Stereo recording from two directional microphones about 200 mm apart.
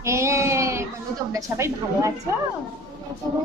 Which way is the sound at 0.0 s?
15° right (ahead or behind).